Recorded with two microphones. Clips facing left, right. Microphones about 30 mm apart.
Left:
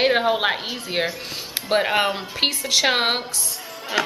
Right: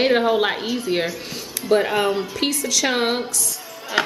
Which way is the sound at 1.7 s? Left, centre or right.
Left.